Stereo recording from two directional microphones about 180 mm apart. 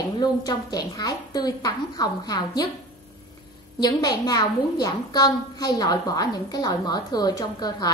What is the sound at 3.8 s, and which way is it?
A woman's voice, 20° left (ahead or behind).